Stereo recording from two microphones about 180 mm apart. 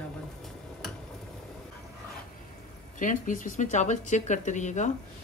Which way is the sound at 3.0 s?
45° left (ahead or behind).